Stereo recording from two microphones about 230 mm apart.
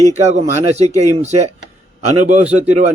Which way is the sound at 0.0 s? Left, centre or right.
Right.